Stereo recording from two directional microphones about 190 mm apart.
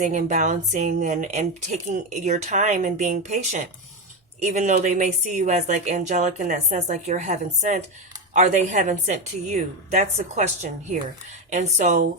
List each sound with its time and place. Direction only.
0.0 s speech: 40° right (ahead or behind)